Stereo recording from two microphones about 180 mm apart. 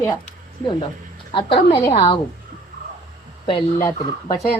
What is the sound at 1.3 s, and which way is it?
Speech, 30° left (ahead or behind).